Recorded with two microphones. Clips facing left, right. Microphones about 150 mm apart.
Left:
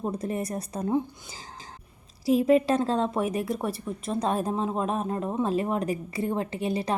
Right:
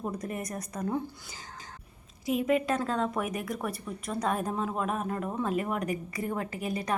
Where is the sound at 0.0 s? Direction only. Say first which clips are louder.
Left 5 dB; 30° left (ahead or behind).